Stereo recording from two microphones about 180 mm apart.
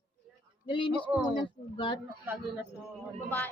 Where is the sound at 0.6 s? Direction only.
30° left (ahead or behind).